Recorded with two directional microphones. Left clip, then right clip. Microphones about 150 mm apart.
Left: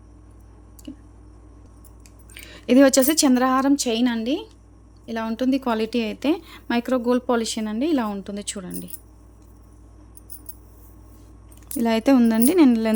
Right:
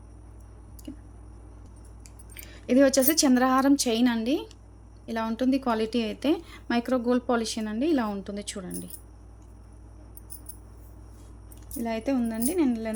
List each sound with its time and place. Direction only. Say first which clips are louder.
2.3 s a woman's voice: left 6 dB; 35° left (ahead or behind)
11.8 s speech: left 10 dB; 65° left (ahead or behind)